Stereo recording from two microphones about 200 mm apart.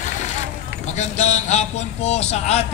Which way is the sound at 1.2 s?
35° left (ahead or behind).